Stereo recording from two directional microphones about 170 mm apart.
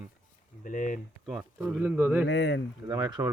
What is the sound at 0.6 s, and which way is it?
Speech, 50° left (ahead or behind).